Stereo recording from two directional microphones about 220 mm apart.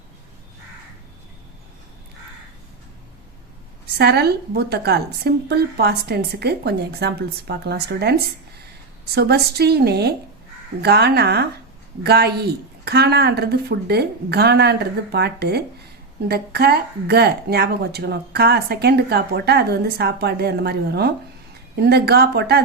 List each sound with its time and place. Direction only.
3.9 s speech: 45° right (ahead or behind)